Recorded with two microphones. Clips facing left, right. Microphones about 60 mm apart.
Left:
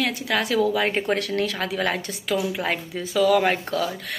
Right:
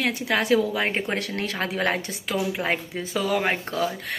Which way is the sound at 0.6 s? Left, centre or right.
Centre.